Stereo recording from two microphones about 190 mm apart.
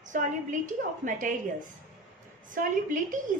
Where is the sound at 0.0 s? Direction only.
40° right (ahead or behind).